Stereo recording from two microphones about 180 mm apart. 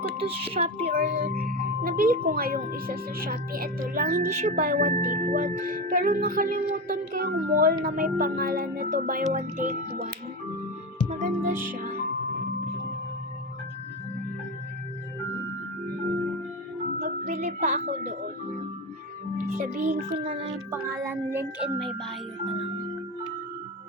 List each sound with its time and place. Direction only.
0.2 s speech: 30° right (ahead or behind)
0.9 s speech: 50° right (ahead or behind)
4.2 s speech: 40° right (ahead or behind)
4.6 s speech: 50° right (ahead or behind)
11.1 s music: 45° right (ahead or behind)
11.5 s music: 10° right (ahead or behind)
17.0 s music: 45° right (ahead or behind)
19.5 s music: 45° right (ahead or behind)
20.1 s speech: 30° right (ahead or behind)
20.7 s music: 15° right (ahead or behind)